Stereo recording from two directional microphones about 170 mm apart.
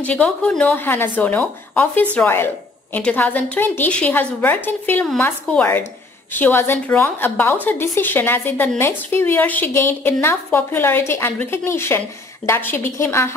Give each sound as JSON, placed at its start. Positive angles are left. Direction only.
{"t": 0.0, "sound": "a woman's voice", "side_deg": 10}